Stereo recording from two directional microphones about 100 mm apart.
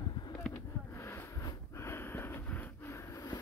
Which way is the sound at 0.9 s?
25° left (ahead or behind).